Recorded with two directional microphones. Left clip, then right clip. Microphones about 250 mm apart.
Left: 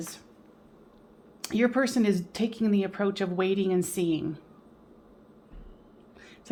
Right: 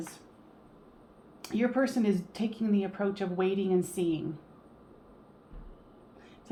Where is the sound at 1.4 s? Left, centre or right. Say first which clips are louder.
Left 3 dB; left.